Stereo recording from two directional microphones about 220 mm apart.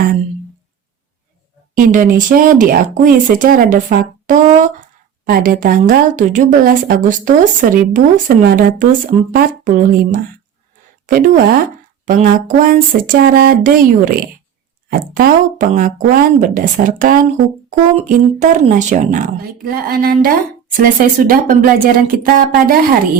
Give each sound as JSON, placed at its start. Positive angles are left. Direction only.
{"t": 1.7, "sound": "speech", "side_deg": -40}
{"t": 11.0, "sound": "a sound", "side_deg": -40}
{"t": 12.0, "sound": "speech", "side_deg": -40}